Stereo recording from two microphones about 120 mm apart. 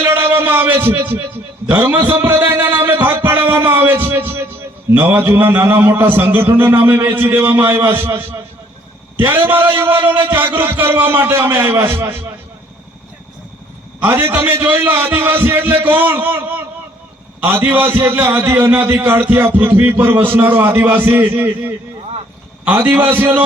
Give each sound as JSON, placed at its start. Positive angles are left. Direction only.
{"t": 0.0, "sound": "a sound", "side_deg": -20}
{"t": 4.9, "sound": "a man's voice", "side_deg": -20}
{"t": 9.1, "sound": "music", "side_deg": -20}
{"t": 14.0, "sound": "music", "side_deg": -20}